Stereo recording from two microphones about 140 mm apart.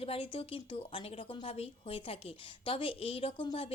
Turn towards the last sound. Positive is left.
turn(degrees=40)  # may be behind; listen again after turning